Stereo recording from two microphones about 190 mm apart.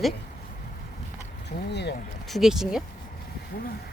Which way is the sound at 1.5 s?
60° left (ahead or behind).